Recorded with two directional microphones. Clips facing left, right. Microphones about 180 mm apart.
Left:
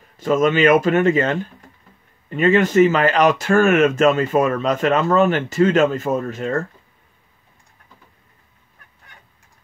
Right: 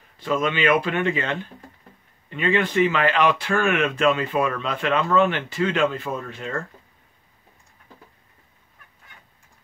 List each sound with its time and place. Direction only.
0.2 s speech: 45° left (ahead or behind)